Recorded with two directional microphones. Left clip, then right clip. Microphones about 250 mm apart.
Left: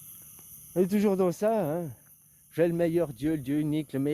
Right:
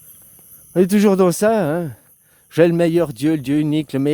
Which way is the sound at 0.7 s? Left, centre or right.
Right.